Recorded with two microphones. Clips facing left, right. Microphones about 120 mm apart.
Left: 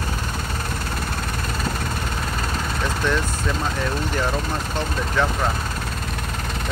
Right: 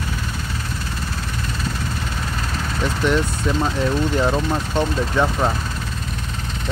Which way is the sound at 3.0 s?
15° right (ahead or behind).